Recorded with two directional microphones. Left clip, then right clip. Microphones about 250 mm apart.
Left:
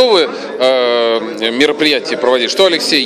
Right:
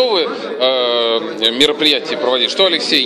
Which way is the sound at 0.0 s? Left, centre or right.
Left.